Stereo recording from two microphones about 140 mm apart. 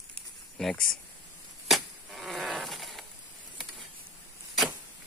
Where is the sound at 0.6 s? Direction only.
Centre (ahead or behind).